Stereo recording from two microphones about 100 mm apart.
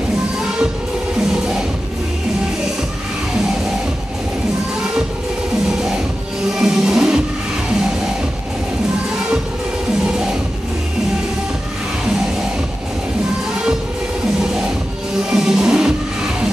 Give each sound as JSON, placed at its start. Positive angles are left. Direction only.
{"t": 6.5, "sound": "music", "side_deg": -5}
{"t": 15.2, "sound": "music", "side_deg": -5}